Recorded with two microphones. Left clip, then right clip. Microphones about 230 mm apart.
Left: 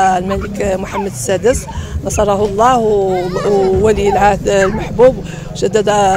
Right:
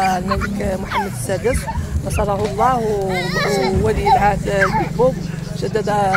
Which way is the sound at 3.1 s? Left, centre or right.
Right.